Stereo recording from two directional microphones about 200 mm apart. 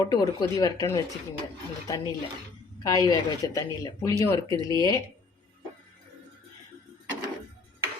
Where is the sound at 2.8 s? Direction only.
20° left (ahead or behind).